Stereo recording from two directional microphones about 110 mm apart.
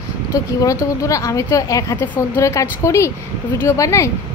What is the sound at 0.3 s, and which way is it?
A woman's voice, 30° left (ahead or behind).